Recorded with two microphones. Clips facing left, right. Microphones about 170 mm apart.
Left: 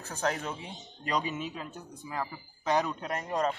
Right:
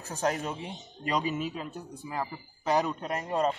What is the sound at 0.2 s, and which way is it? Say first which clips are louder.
Speech: right 2 dB; 20° right (ahead or behind).